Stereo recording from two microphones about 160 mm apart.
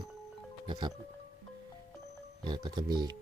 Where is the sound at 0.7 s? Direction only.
30° right (ahead or behind).